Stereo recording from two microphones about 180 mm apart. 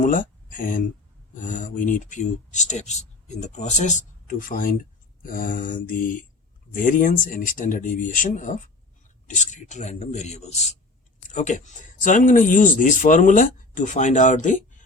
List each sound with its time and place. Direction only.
0.0 s speech: 45° left (ahead or behind)